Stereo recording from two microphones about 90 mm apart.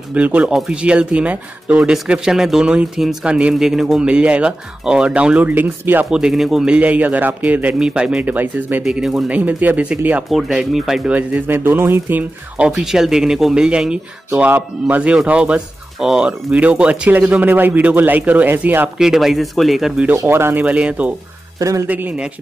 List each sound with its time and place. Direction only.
0.1 s speech: 15° right (ahead or behind)
6.0 s speech: 10° right (ahead or behind)
8.8 s speech: 5° right (ahead or behind)
9.3 s speech: 15° right (ahead or behind)
11.1 s speech: 20° right (ahead or behind)
18.9 s speech: 5° right (ahead or behind)
20.2 s speech: 25° right (ahead or behind)
20.6 s speech: 15° right (ahead or behind)
21.5 s speech: 35° right (ahead or behind)
21.8 s speech: 20° right (ahead or behind)